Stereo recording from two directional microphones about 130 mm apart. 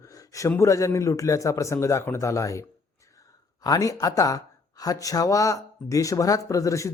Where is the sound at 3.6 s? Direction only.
25° left (ahead or behind).